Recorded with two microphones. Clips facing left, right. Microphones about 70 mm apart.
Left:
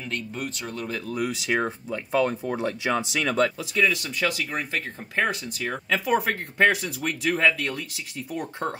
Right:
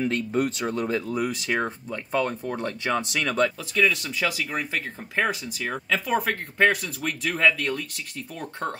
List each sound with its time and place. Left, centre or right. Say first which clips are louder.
0.3 s speech: right 8 dB; right
1.0 s speech: right 1 dB; centre